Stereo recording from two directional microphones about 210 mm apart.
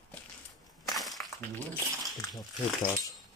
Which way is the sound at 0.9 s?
Centre (ahead or behind).